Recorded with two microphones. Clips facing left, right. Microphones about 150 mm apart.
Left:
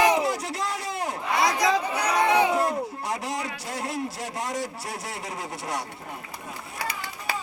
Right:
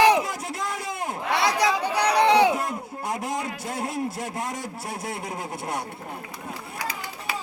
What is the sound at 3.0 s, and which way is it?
A man's voice, 50° right (ahead or behind).